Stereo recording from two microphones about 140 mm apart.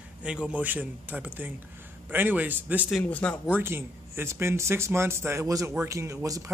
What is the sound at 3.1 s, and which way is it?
Speech, 10° left (ahead or behind).